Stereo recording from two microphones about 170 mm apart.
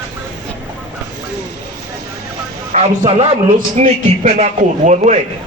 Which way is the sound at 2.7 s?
40° right (ahead or behind).